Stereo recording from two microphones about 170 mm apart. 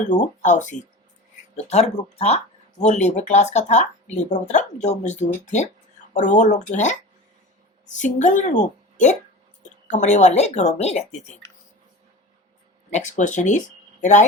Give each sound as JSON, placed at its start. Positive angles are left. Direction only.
{"t": 0.0, "sound": "speech", "side_deg": 45}
{"t": 12.9, "sound": "speech", "side_deg": 45}